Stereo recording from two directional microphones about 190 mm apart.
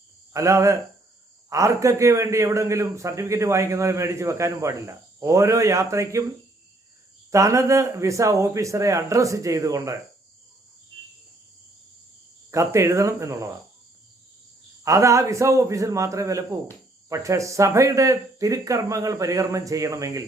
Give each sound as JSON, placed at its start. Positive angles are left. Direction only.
{"t": 0.3, "sound": "a man's voice", "side_deg": -15}
{"t": 7.3, "sound": "a man's voice", "side_deg": -15}
{"t": 12.5, "sound": "a man's voice", "side_deg": -15}
{"t": 14.8, "sound": "a man's voice", "side_deg": -15}